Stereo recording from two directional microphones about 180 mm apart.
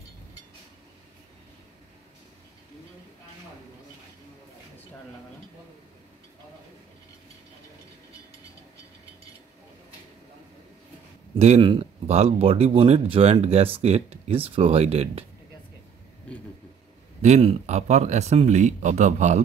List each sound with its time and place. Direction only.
11.3 s speech: 35° right (ahead or behind)
17.2 s speech: 35° right (ahead or behind)